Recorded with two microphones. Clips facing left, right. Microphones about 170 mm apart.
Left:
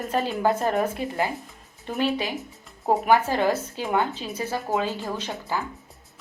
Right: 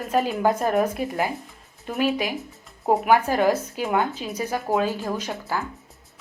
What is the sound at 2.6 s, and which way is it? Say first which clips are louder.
Music: right 2 dB; centre (ahead or behind).